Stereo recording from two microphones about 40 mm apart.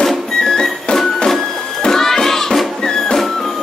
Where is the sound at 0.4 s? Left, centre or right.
Centre.